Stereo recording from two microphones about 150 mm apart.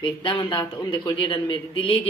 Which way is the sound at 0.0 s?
35° left (ahead or behind).